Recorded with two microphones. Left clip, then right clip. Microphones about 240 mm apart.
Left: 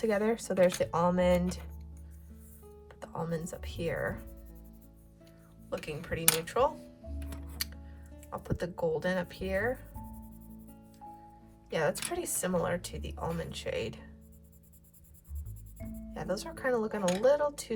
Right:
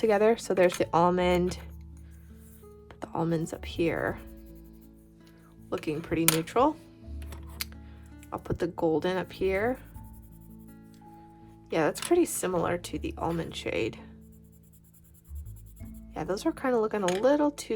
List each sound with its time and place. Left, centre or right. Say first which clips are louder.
0.0 s speech: right 7 dB; right
3.0 s a woman's voice: right 7 dB; right
5.8 s a woman's voice: right 5 dB; right
8.3 s a woman's voice: right 5 dB; right
11.7 s a woman's voice: right 6 dB; right
15.8 s music: left 4 dB; centre
16.3 s a woman's voice: right 4 dB; right